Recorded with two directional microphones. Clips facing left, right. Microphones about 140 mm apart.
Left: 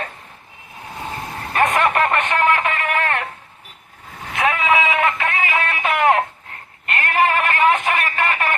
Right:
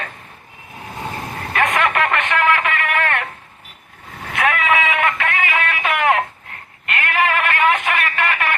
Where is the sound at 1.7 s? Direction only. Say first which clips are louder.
Left 1 dB; 25° left (ahead or behind).